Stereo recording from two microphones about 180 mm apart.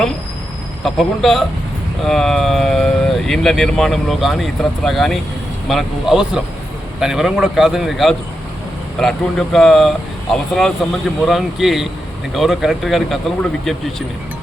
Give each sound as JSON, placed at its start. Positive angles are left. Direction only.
{"t": 0.9, "sound": "speech", "side_deg": 0}